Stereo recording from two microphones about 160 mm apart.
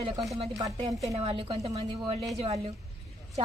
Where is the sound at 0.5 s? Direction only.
20° right (ahead or behind).